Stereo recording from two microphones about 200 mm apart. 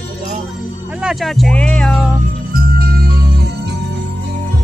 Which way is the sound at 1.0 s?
Centre (ahead or behind).